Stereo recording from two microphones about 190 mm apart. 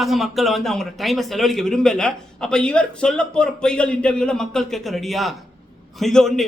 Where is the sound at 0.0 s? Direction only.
Centre (ahead or behind).